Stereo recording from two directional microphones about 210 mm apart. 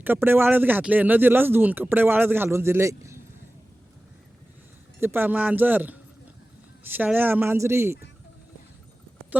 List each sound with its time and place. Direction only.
0.0 s speech: 10° right (ahead or behind)
4.9 s speech: 10° right (ahead or behind)